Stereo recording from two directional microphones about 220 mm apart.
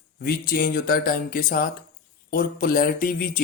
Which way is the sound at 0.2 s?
45° left (ahead or behind).